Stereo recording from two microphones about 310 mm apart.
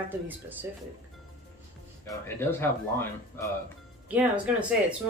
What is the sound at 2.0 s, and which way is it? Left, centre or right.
Speech, centre.